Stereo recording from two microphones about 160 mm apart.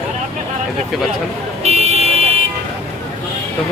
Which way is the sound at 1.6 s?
40° right (ahead or behind).